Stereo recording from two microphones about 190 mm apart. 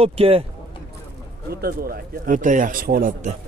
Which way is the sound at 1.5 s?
50° right (ahead or behind).